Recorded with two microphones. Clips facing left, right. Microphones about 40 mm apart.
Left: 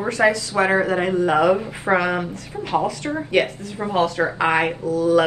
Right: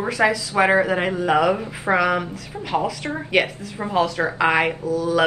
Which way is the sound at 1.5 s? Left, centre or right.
Centre.